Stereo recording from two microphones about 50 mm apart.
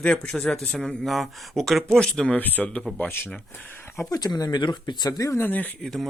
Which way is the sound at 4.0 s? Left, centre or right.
Left.